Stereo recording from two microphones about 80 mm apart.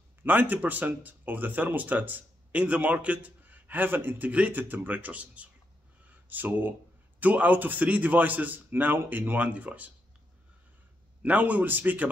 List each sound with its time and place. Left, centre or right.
0.2 s speech: right
6.0 s a sound: right
7.2 s speech: centre
11.2 s speech: centre